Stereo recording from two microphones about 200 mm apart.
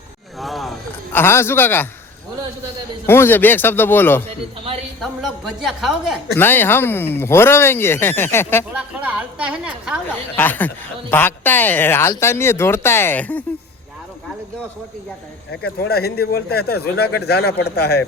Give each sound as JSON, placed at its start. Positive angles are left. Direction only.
{"t": 0.3, "sound": "a sound", "side_deg": 0}
{"t": 1.1, "sound": "speech", "side_deg": 10}
{"t": 3.1, "sound": "speech", "side_deg": 10}
{"t": 4.9, "sound": "a woman's voice", "side_deg": 0}
{"t": 6.3, "sound": "speech", "side_deg": 10}
{"t": 8.7, "sound": "a woman's voice", "side_deg": -5}
{"t": 10.3, "sound": "speech", "side_deg": 10}
{"t": 15.6, "sound": "speech", "side_deg": 50}